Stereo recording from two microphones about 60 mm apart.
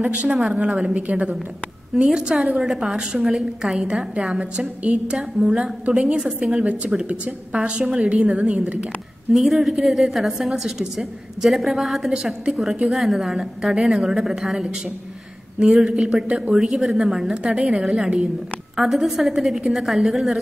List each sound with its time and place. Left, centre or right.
0.0 s a woman's voice: centre
2.0 s a woman's voice: centre
4.4 s a woman's voice: right
6.6 s a woman's voice: right
9.3 s a woman's voice: centre